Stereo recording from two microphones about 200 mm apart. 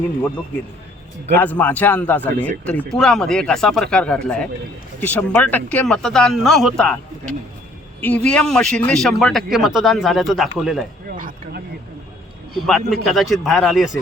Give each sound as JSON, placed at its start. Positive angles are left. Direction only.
{"t": 1.4, "sound": "a man's voice", "side_deg": 10}
{"t": 11.2, "sound": "speech", "side_deg": -45}
{"t": 12.5, "sound": "a man's voice", "side_deg": 0}